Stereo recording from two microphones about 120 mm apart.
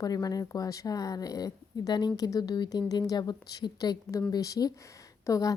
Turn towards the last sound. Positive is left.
turn(degrees=30)  # may be behind; listen again after turning